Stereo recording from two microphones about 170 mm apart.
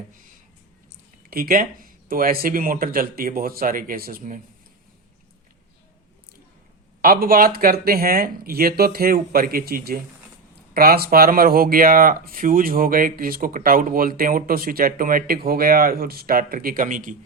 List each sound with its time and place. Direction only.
1.3 s speech: 60° right (ahead or behind)
7.0 s speech: 60° right (ahead or behind)